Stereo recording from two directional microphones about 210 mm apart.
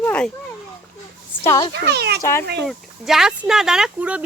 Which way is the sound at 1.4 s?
15° left (ahead or behind).